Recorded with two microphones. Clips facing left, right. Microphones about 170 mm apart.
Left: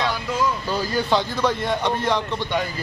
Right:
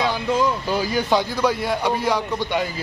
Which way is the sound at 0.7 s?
10° right (ahead or behind).